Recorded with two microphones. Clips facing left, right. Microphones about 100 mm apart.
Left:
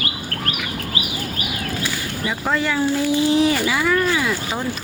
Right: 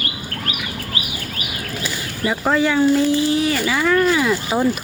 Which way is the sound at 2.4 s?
Centre (ahead or behind).